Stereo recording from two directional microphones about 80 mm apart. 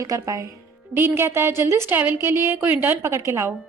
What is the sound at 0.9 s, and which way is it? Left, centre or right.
A woman's voice, right.